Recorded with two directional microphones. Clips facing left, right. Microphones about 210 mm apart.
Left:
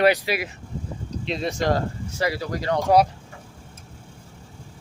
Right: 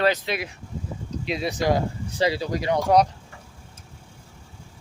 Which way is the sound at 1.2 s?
5° right (ahead or behind).